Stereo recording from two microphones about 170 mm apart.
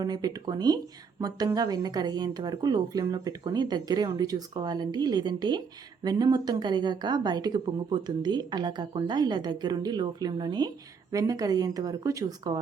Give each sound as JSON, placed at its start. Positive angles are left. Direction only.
{"t": 0.0, "sound": "speech", "side_deg": -20}